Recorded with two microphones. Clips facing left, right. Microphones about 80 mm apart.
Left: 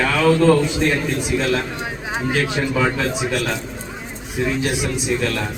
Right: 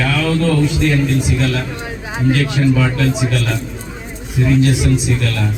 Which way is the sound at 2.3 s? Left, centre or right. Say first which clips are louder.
Right 2 dB; left.